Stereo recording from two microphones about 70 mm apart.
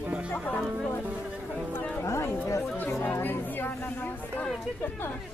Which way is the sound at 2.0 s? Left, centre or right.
Left.